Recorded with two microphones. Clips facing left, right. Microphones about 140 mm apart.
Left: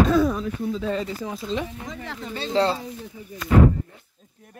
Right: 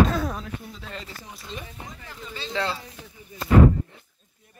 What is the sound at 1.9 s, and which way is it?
Speech, 60° left (ahead or behind).